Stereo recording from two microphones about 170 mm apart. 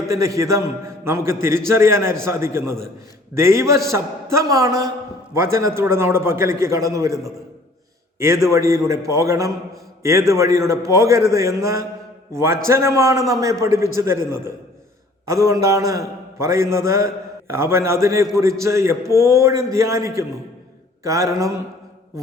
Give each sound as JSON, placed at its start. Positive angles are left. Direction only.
{"t": 0.1, "sound": "a man's voice", "side_deg": -20}
{"t": 21.0, "sound": "mantra", "side_deg": -20}